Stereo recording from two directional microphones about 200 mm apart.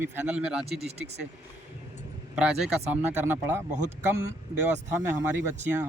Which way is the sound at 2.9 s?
10° right (ahead or behind).